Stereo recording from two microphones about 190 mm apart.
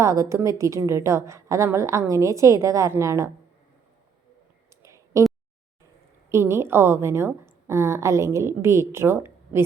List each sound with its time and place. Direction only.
0.0 s a woman's voice: 15° right (ahead or behind)
4.8 s a sound: 15° right (ahead or behind)
6.3 s a woman's voice: 15° right (ahead or behind)